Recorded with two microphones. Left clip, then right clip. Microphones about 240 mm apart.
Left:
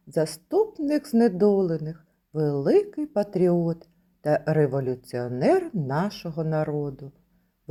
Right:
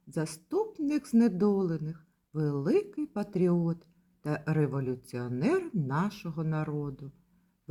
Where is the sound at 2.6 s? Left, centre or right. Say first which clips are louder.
Left 7 dB; centre.